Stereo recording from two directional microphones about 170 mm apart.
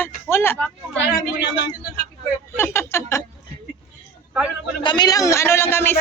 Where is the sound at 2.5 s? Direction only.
15° left (ahead or behind).